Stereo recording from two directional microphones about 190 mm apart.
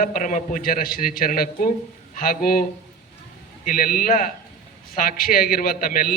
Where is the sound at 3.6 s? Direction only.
50° left (ahead or behind).